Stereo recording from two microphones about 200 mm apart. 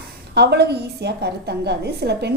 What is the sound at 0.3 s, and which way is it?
A woman's voice, 55° right (ahead or behind).